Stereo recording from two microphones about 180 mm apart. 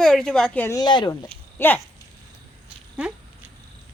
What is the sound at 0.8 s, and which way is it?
Speech, 25° left (ahead or behind).